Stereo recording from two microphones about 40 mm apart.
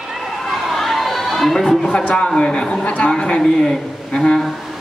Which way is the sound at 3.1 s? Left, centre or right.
Left.